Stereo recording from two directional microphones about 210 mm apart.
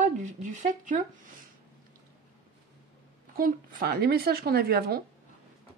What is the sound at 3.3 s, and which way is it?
Speech, 45° right (ahead or behind).